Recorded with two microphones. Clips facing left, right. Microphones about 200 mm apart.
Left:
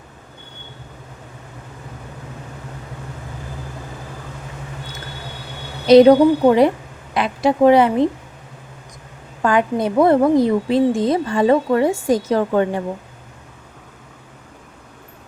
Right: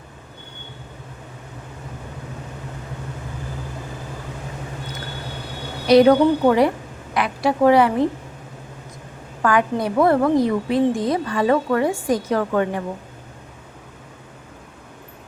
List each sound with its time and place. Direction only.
5.9 s a woman's voice: 20° left (ahead or behind)
9.4 s a woman's voice: 25° left (ahead or behind)